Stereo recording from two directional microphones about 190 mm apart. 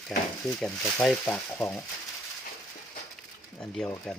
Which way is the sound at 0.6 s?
5° left (ahead or behind).